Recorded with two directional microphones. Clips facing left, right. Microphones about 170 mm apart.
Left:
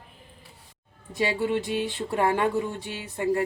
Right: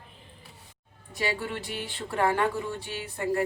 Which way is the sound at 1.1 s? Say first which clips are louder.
Left 6 dB; 20° left (ahead or behind).